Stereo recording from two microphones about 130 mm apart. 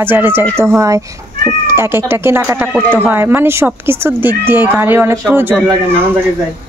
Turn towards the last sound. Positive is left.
turn(degrees=-15)  # may be behind; listen again after turning